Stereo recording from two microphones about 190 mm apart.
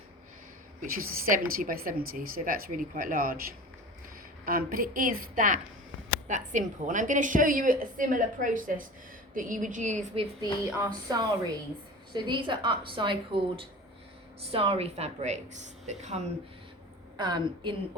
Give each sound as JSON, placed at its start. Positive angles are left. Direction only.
{"t": 0.8, "sound": "a woman's voice", "side_deg": -45}
{"t": 4.4, "sound": "a woman's voice", "side_deg": -50}
{"t": 10.6, "sound": "a sound", "side_deg": -20}
{"t": 12.1, "sound": "a woman's voice", "side_deg": -25}
{"t": 17.2, "sound": "a woman's voice", "side_deg": -25}